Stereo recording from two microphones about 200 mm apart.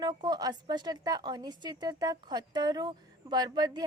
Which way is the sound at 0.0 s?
20° right (ahead or behind).